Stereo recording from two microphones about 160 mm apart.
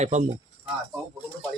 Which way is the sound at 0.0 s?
45° right (ahead or behind).